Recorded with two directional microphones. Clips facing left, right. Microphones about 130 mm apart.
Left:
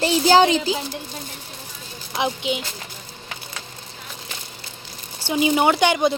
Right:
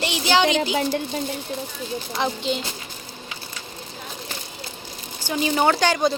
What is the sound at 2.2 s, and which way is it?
Speech, 10° left (ahead or behind).